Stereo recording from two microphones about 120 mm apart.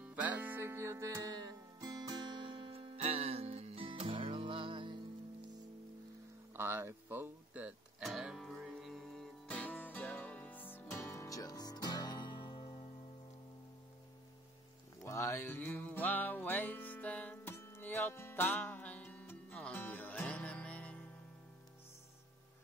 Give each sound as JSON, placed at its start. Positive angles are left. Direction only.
{"t": 0.0, "sound": "music", "side_deg": -15}
{"t": 3.0, "sound": "music", "side_deg": -60}
{"t": 6.5, "sound": "a sound", "side_deg": -20}
{"t": 8.0, "sound": "music", "side_deg": -5}
{"t": 15.0, "sound": "music", "side_deg": 25}